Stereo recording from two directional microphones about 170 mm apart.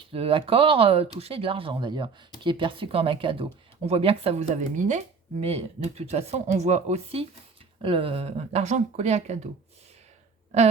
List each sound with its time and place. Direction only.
0.1 s speech: 30° right (ahead or behind)